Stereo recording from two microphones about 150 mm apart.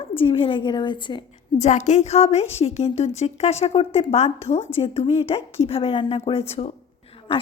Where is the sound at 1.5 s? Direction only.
50° left (ahead or behind).